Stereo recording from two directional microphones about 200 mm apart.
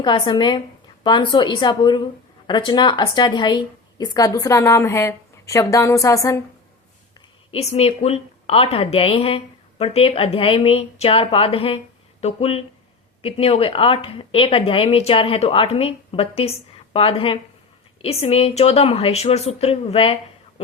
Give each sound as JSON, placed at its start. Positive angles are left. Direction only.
{"t": 0.0, "sound": "a woman's voice", "side_deg": 20}
{"t": 7.5, "sound": "a woman's voice", "side_deg": 30}